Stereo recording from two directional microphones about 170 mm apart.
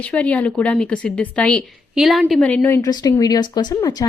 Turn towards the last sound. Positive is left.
turn(degrees=20)  # may be behind; listen again after turning